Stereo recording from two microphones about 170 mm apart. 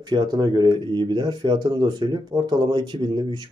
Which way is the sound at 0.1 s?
25° right (ahead or behind).